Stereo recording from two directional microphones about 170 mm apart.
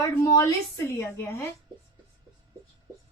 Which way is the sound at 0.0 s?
20° left (ahead or behind).